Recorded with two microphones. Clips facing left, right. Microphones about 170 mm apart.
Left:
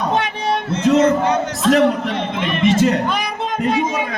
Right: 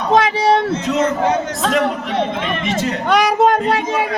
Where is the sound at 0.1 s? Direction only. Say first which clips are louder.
Right 6 dB; 90° right.